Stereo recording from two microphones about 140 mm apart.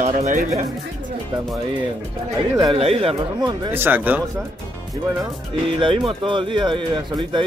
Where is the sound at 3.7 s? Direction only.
15° right (ahead or behind).